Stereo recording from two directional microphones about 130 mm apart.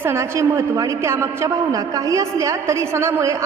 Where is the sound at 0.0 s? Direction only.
20° right (ahead or behind).